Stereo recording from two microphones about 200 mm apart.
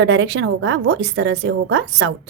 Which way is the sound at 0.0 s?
65° right (ahead or behind).